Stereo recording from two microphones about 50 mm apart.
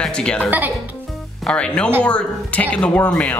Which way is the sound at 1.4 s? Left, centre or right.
Left.